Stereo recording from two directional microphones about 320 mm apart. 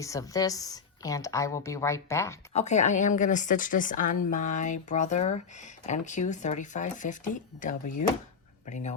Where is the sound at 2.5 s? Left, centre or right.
Left.